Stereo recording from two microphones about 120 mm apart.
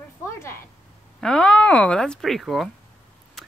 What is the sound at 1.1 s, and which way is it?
Speech, 5° left (ahead or behind).